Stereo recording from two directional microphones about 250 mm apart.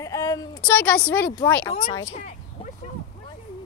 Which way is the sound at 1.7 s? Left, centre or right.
Left.